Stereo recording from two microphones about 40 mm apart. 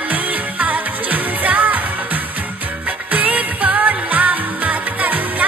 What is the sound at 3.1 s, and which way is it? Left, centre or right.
Music, right.